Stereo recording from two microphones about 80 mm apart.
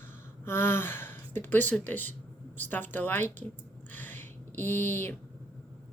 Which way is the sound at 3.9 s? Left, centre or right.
Left.